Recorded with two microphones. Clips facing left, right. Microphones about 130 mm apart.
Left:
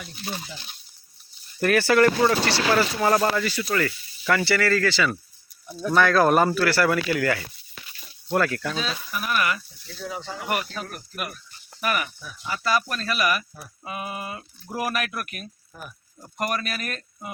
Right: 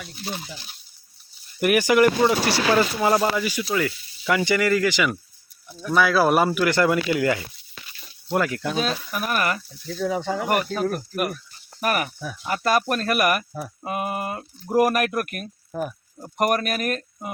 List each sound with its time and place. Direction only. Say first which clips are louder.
0.3 s speech: right 1 dB; 15° right (ahead or behind)
8.8 s speech: right 4 dB; 50° right (ahead or behind)
10.0 s speech: right 9 dB; 60° right (ahead or behind); by 12.1 s 40° right (ahead or behind)
12.5 s speech: right 4 dB; 55° right (ahead or behind)